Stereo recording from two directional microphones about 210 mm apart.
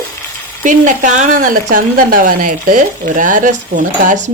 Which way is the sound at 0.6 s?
35° right (ahead or behind).